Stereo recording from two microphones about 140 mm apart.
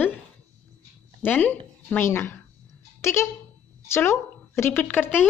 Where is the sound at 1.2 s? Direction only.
10° left (ahead or behind).